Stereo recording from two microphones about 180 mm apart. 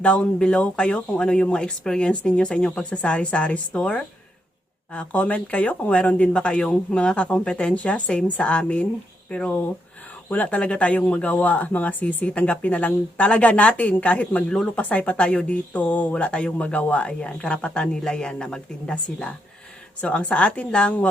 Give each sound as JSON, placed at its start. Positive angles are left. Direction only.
{"t": 0.0, "sound": "speech", "side_deg": 5}